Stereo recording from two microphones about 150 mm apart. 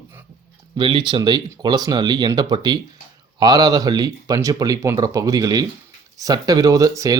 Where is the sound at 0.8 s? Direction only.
35° right (ahead or behind).